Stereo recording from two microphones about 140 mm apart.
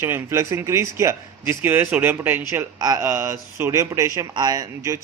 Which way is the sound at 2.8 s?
25° right (ahead or behind).